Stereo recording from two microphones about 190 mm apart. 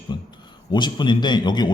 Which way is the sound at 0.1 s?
25° left (ahead or behind).